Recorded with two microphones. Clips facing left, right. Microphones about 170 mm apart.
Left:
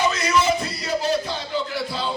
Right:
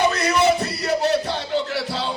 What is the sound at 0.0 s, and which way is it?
Music, 60° right (ahead or behind).